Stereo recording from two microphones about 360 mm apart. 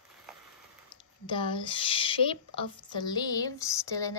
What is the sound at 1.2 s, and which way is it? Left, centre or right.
A woman's voice, centre.